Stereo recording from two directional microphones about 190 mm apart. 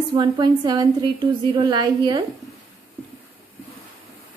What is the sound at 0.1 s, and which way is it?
A woman's voice, 25° right (ahead or behind).